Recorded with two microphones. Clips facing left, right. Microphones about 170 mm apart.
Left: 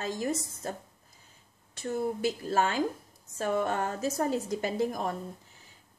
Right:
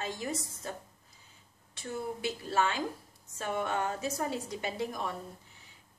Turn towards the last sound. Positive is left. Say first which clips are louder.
# left 5 dB
turn(degrees=45)  # may be behind; listen again after turning